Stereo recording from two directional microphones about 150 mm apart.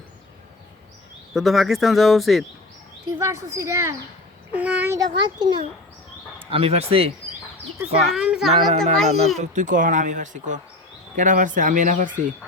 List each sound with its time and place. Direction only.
1.3 s speech: centre (ahead or behind)
3.2 s a child's voice: 20° right (ahead or behind)
6.5 s a child's voice: 40° right (ahead or behind)
8.1 s speech: 5° right (ahead or behind)
9.4 s speech: 60° right (ahead or behind)